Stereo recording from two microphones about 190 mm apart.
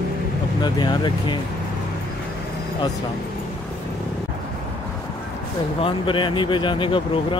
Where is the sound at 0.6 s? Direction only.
20° left (ahead or behind).